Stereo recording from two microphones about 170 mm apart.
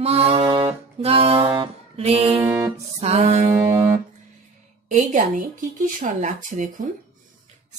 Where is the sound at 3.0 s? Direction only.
40° right (ahead or behind).